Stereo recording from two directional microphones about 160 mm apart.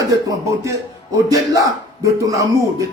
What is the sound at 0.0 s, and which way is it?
Speech, 20° right (ahead or behind).